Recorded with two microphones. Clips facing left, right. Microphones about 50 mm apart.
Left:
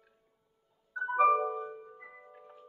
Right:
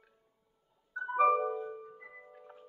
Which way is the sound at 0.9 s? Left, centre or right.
Centre.